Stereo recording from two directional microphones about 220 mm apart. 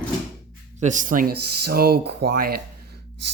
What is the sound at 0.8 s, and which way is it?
Speech, 35° right (ahead or behind).